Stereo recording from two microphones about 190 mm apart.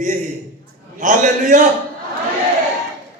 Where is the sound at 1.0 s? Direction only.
40° right (ahead or behind).